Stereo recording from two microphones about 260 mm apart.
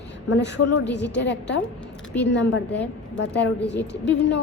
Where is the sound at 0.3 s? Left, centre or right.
Left.